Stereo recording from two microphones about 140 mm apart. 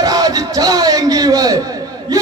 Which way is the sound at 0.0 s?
25° right (ahead or behind).